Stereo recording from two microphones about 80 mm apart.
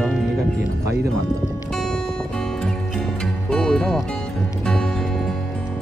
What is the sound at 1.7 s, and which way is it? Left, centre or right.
Music, centre.